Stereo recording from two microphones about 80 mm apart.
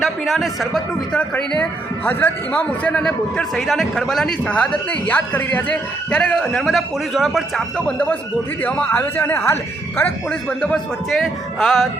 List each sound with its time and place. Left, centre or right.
0.0 s a man's voice: centre
2.0 s a man's voice: left; by 4.4 s centre
4.4 s a man's voice: centre
7.9 s a man's voice: left
11.1 s a man's voice: centre